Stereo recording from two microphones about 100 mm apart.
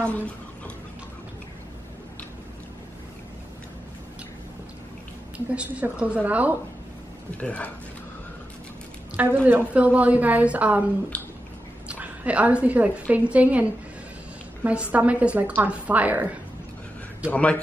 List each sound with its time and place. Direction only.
5.5 s a woman's voice: 10° right (ahead or behind)
7.3 s speech: 15° left (ahead or behind)
9.1 s a woman's voice: 15° right (ahead or behind)
11.9 s a woman's voice: 15° right (ahead or behind)
17.3 s speech: 15° left (ahead or behind)